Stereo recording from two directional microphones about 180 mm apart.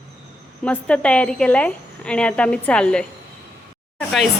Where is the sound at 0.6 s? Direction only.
5° left (ahead or behind).